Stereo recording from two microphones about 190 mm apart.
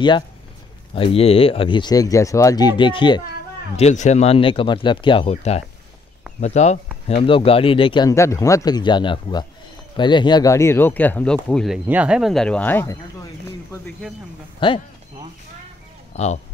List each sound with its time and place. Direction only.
0.9 s speech: 30° left (ahead or behind)
3.7 s speech: 35° left (ahead or behind)
16.1 s speech: 35° left (ahead or behind)